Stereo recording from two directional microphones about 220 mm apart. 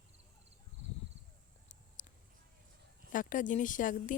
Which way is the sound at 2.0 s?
35° left (ahead or behind).